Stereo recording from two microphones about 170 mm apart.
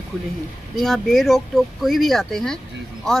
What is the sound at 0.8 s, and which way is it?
Speech, centre (ahead or behind).